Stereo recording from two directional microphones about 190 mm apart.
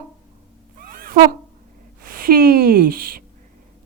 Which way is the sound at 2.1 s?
50° right (ahead or behind).